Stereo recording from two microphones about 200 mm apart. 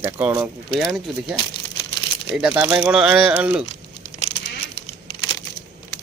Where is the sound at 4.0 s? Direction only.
30° left (ahead or behind).